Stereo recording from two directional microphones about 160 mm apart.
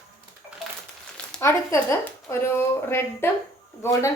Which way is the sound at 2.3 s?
15° left (ahead or behind).